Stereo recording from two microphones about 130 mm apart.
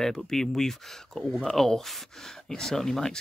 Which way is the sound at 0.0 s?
5° left (ahead or behind).